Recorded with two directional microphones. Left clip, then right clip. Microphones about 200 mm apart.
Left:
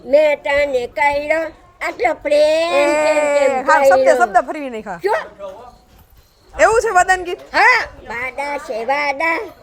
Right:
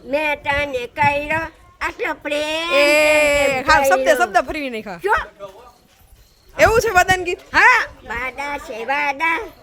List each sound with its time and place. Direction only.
0.1 s a woman's voice: 10° right (ahead or behind)
2.7 s speech: 25° right (ahead or behind)
6.6 s a woman's voice: 15° right (ahead or behind)